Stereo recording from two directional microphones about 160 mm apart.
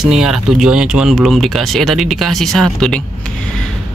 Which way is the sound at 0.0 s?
Centre (ahead or behind).